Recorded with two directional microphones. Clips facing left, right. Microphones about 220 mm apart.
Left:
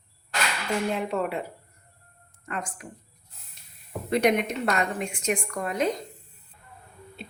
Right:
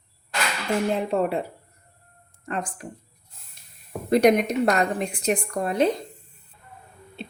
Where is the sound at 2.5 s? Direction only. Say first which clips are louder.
Right 4 dB; 35° right (ahead or behind).